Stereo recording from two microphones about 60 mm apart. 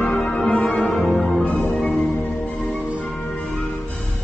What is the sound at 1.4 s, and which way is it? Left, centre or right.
Music, left.